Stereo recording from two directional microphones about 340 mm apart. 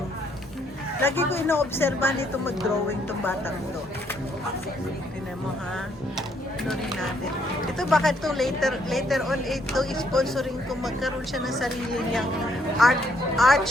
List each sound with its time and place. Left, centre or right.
1.0 s speech: centre
7.8 s speech: centre